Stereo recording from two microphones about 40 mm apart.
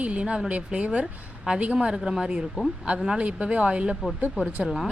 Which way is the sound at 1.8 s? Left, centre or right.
Centre.